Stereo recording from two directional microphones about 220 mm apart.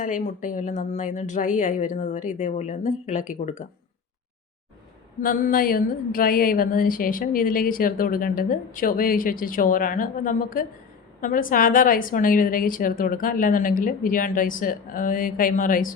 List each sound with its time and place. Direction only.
0.0 s speech: 35° left (ahead or behind)
5.2 s speech: 40° left (ahead or behind)